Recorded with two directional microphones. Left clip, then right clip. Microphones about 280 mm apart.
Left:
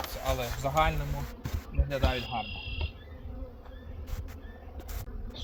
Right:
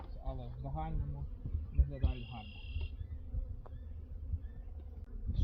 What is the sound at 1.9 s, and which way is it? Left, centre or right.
Speech, left.